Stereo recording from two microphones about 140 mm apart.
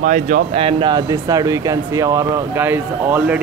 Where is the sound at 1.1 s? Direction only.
25° right (ahead or behind).